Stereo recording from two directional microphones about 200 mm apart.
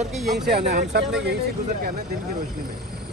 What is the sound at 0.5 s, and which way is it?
Speech, 55° right (ahead or behind).